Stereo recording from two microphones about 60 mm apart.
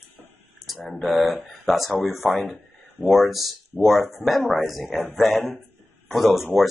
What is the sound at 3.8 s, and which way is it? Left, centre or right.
Speech, centre.